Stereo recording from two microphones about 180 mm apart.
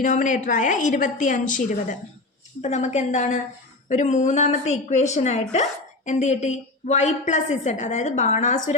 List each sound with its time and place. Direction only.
0.0 s a woman's voice: 45° left (ahead or behind)